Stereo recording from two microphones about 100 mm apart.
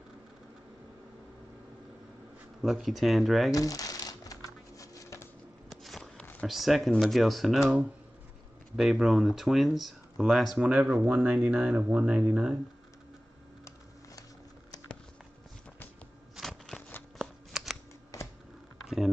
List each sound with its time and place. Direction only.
2.6 s speech: centre (ahead or behind)
3.5 s crumpling: 35° left (ahead or behind)
5.7 s walk: 5° left (ahead or behind)
6.4 s speech: centre (ahead or behind)
8.7 s speech: 5° right (ahead or behind)
16.3 s a sound: 5° left (ahead or behind)
17.2 s shuffling cards: 5° right (ahead or behind)